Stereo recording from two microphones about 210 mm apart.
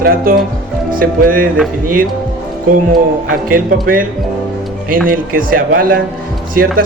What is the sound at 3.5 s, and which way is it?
Speech, 45° right (ahead or behind).